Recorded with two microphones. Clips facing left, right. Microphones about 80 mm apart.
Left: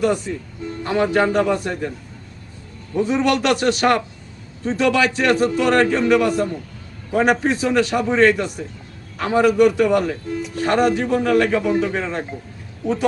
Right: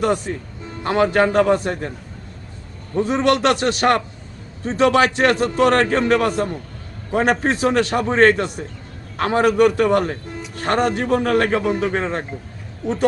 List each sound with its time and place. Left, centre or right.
0.0 s a man's voice: right
3.1 s a man's voice: right